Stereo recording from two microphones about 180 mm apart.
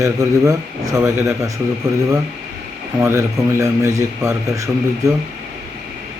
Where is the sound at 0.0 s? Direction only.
15° right (ahead or behind).